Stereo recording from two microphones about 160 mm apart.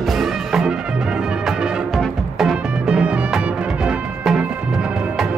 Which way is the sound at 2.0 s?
Centre (ahead or behind).